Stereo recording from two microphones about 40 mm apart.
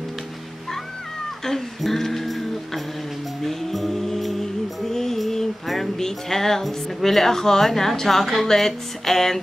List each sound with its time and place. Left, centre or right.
1.4 s music: centre